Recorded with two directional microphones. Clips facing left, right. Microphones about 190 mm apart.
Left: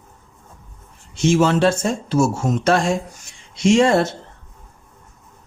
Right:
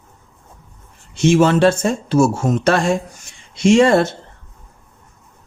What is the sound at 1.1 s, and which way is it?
Speech, 65° right (ahead or behind).